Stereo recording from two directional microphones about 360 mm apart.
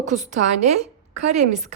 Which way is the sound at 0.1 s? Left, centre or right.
Centre.